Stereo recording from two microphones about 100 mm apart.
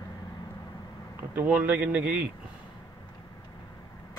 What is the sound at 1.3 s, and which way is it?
Speech, 15° right (ahead or behind).